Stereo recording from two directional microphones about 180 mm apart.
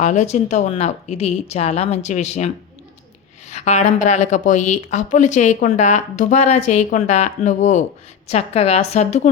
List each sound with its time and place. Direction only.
0.0 s a woman's voice: 40° left (ahead or behind)
3.5 s a woman's voice: 40° left (ahead or behind)